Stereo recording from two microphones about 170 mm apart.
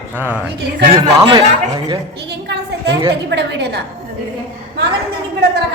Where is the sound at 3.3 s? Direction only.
90° right.